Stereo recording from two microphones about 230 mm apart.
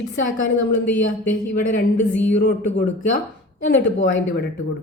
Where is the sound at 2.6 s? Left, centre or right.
Left.